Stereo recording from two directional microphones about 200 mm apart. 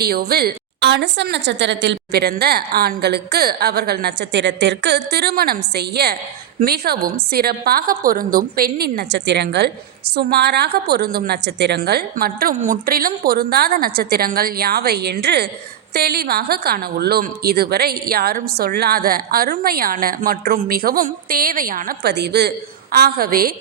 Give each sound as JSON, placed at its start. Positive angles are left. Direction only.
{"t": 0.0, "sound": "a woman's voice", "side_deg": -50}